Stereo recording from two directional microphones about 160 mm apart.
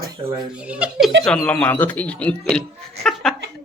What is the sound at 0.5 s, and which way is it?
Speech, 10° right (ahead or behind).